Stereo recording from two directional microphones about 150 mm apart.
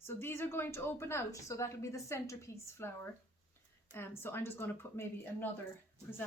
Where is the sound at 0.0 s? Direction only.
15° left (ahead or behind).